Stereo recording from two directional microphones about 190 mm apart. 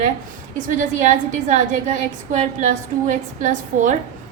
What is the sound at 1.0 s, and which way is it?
A woman's voice, 40° right (ahead or behind).